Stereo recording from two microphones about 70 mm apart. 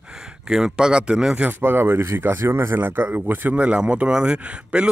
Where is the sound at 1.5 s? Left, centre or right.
Right.